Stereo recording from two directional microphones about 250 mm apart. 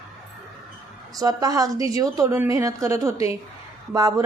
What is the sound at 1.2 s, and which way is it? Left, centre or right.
A woman's voice, centre.